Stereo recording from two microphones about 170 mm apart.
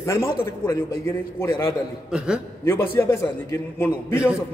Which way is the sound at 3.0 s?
15° left (ahead or behind).